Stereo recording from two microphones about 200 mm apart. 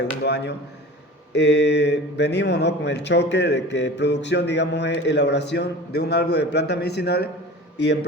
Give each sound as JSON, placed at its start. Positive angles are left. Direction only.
{"t": 0.3, "sound": "speech", "side_deg": 55}